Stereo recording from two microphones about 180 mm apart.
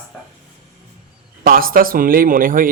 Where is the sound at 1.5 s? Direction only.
55° right (ahead or behind).